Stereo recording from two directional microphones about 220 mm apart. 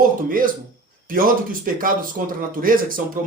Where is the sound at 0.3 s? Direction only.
40° right (ahead or behind).